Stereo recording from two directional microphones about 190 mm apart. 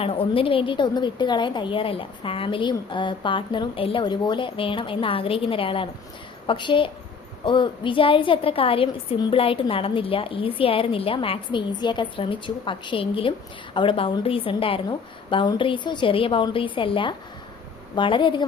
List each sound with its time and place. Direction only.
0.0 s a woman's voice: 30° left (ahead or behind)